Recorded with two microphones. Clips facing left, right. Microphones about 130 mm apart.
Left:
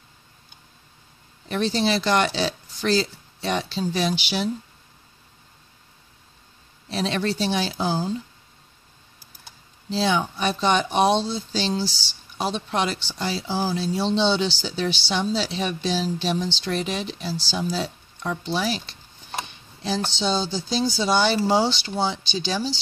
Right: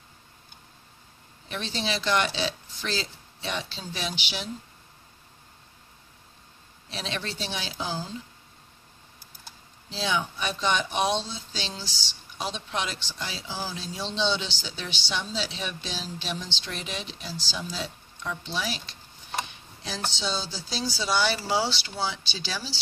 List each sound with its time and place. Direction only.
1.5 s speech: 40° left (ahead or behind)
6.9 s speech: 40° left (ahead or behind)
10.0 s speech: 35° left (ahead or behind)
19.8 s speech: 30° left (ahead or behind)